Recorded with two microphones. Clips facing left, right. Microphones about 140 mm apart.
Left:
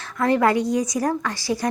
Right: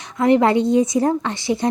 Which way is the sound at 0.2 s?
20° right (ahead or behind).